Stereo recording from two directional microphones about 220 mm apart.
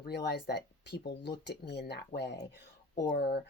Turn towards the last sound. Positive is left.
turn(degrees=45)  # may be behind; listen again after turning